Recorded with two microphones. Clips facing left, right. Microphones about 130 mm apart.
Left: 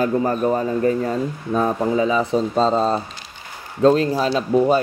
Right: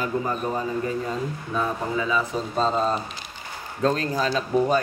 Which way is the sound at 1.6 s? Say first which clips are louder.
Left 7 dB; 40° left (ahead or behind).